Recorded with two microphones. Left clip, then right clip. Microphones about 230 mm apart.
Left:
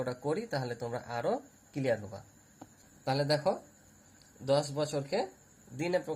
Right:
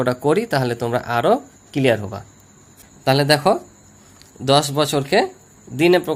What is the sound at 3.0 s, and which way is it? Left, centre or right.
Speech, right.